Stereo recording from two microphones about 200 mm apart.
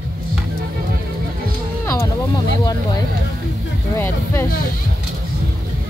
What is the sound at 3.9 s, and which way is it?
Speech, 10° left (ahead or behind).